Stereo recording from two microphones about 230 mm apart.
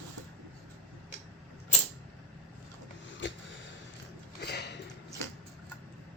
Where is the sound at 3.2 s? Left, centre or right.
Left.